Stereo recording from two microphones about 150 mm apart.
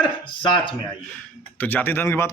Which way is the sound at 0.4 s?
30° left (ahead or behind).